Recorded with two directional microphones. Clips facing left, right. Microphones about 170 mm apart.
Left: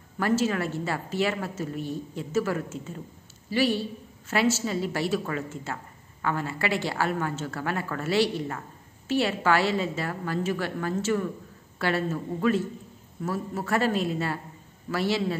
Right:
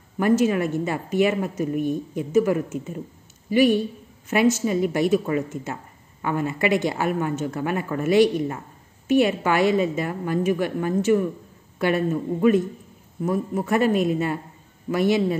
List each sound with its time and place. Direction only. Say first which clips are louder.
0.2 s a woman's voice: right 6 dB; 15° right (ahead or behind)